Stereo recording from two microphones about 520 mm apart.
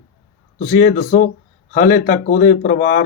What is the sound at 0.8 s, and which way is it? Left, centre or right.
Speech, centre.